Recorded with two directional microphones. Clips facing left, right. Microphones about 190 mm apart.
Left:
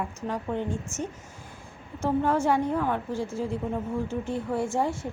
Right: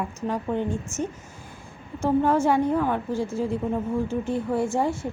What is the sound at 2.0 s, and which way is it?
A woman's voice, 10° right (ahead or behind).